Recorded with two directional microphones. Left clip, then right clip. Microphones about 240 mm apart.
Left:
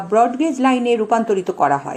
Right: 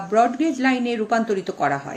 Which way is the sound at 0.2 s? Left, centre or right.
Centre.